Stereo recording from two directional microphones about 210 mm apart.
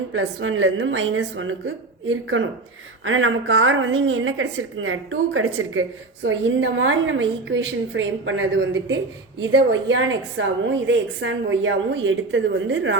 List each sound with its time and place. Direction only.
0.1 s a woman's voice: 65° right (ahead or behind)
6.2 s a woman's voice: 65° right (ahead or behind)